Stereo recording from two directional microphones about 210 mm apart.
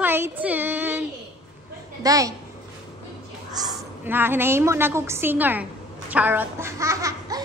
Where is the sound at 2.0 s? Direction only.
15° right (ahead or behind).